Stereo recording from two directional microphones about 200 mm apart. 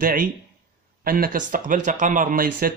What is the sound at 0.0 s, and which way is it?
Speech, 45° right (ahead or behind).